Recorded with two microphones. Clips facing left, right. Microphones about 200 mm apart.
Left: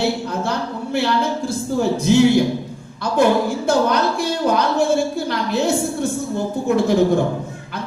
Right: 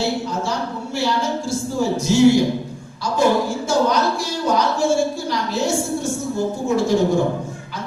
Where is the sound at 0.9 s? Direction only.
60° left (ahead or behind).